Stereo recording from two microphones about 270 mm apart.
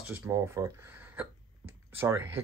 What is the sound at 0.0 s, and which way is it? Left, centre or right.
Speech, centre.